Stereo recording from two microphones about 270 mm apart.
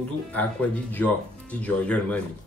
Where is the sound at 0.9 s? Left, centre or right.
Centre.